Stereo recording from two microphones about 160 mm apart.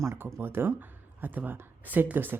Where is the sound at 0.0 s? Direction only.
15° right (ahead or behind).